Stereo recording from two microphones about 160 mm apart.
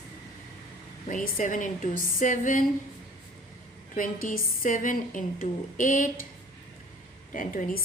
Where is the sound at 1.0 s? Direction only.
55° left (ahead or behind).